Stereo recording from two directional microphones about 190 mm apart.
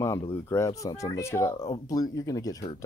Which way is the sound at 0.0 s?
15° left (ahead or behind).